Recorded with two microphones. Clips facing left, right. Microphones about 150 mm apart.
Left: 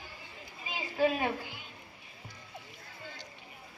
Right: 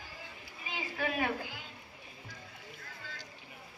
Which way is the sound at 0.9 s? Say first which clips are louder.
Left 6 dB; 25° left (ahead or behind).